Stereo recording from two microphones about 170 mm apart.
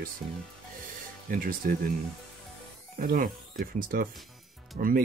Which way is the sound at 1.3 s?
55° right (ahead or behind).